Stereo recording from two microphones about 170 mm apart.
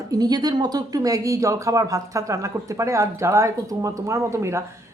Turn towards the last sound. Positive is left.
turn(degrees=-15)  # may be behind; listen again after turning